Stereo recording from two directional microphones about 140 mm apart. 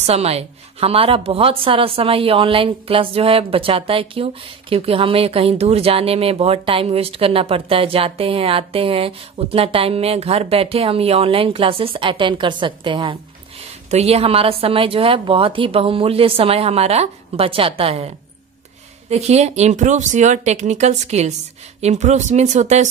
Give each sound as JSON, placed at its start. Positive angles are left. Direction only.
{"t": 0.0, "sound": "a woman's voice", "side_deg": -45}
{"t": 13.8, "sound": "a woman's voice", "side_deg": -50}